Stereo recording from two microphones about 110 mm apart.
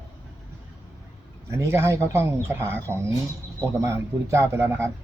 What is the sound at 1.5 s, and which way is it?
Speech, 25° right (ahead or behind).